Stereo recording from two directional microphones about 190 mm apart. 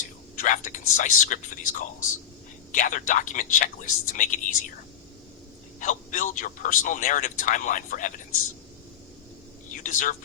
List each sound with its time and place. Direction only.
0.3 s speech: 45° left (ahead or behind)
5.8 s speech: 45° left (ahead or behind)
9.8 s speech: 40° left (ahead or behind)